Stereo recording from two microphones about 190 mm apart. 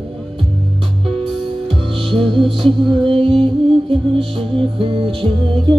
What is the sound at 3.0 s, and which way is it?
Music, 30° right (ahead or behind).